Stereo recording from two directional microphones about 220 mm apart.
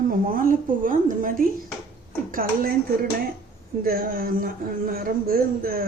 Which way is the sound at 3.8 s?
40° right (ahead or behind).